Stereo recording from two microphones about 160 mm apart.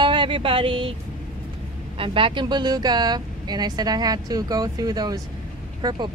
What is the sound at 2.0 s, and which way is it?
Speech, 35° right (ahead or behind).